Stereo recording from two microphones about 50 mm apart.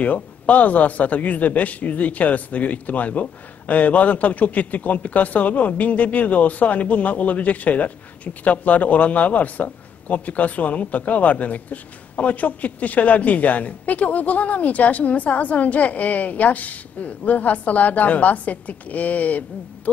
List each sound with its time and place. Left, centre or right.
0.0 s speech: left